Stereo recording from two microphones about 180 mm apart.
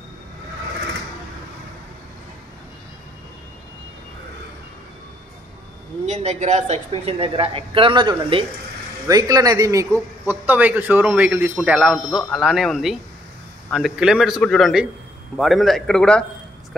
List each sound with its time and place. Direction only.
6.0 s a woman's voice: 35° right (ahead or behind); by 16.3 s 5° left (ahead or behind)